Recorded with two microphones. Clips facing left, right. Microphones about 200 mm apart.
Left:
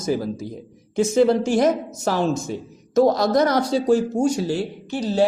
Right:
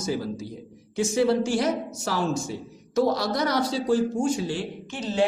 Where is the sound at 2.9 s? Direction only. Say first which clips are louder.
Left 7 dB; 45° left (ahead or behind).